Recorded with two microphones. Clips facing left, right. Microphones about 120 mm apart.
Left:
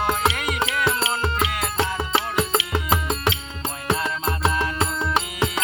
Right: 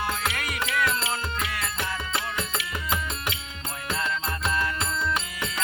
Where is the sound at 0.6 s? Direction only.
90° left.